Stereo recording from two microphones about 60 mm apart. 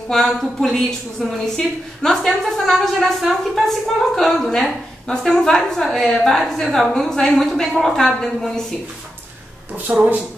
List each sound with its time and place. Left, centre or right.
0.1 s a woman's voice: centre
9.9 s speech: right